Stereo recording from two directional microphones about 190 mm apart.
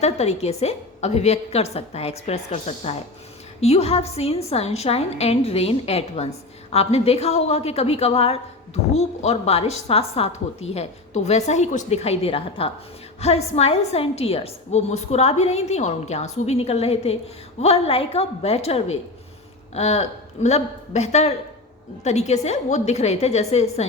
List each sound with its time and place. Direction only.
0.0 s a woman's voice: 35° left (ahead or behind)